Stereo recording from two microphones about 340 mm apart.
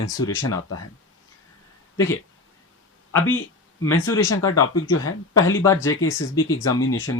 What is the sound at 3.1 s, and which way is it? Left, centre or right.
Speech, left.